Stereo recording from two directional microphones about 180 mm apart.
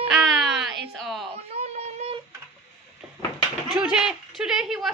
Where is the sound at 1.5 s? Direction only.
35° right (ahead or behind).